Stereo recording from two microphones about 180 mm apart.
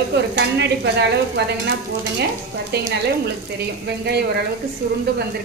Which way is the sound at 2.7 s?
65° right (ahead or behind).